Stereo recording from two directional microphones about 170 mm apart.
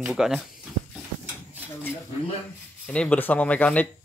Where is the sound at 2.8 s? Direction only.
5° left (ahead or behind).